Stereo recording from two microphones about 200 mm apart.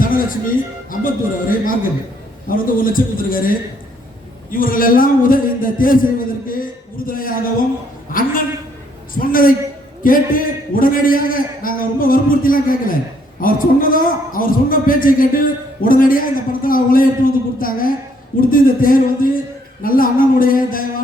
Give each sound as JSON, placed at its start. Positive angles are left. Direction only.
{"t": 0.0, "sound": "a man's voice", "side_deg": 45}
{"t": 4.5, "sound": "a man's voice", "side_deg": 45}
{"t": 9.1, "sound": "a man's voice", "side_deg": 45}